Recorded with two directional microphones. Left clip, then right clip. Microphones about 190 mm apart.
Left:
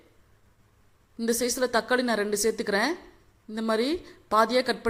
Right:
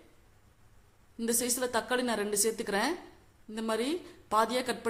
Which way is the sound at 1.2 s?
20° left (ahead or behind).